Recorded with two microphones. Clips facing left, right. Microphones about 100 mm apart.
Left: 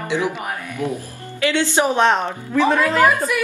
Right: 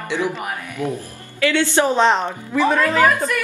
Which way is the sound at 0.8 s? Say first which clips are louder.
Even; 25° right (ahead or behind).